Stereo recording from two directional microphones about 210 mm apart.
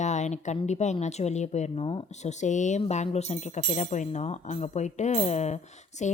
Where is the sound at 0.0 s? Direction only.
35° left (ahead or behind).